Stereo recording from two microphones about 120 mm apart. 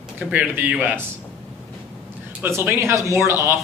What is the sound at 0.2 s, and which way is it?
Speech, 15° right (ahead or behind).